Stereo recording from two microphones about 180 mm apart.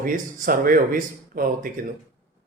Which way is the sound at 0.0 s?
50° right (ahead or behind).